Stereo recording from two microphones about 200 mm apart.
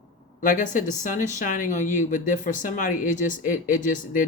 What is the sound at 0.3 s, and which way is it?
Speech, 40° left (ahead or behind).